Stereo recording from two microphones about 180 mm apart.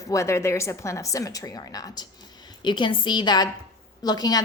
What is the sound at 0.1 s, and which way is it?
A woman's voice, 15° left (ahead or behind).